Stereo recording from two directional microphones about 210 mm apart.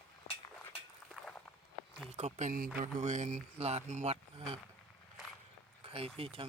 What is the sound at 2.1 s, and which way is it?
Speech, 30° right (ahead or behind).